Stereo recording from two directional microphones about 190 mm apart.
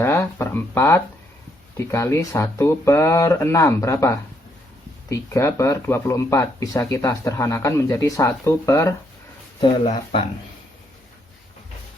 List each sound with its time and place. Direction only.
0.0 s speech: 15° left (ahead or behind)
9.6 s speech: 30° left (ahead or behind)